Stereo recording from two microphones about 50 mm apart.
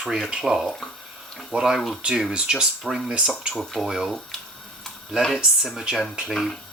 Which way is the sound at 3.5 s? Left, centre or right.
Centre.